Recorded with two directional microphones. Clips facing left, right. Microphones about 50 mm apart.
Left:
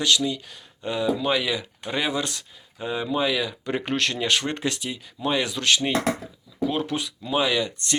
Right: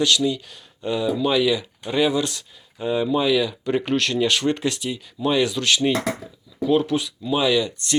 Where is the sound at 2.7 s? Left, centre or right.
Left.